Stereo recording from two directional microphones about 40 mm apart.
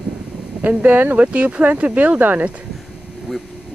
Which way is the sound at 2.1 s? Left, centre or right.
Right.